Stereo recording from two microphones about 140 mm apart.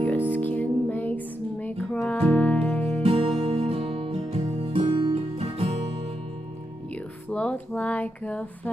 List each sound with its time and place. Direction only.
0.3 s music: 15° left (ahead or behind)
3.0 s music: 45° right (ahead or behind)
7.2 s music: 10° left (ahead or behind)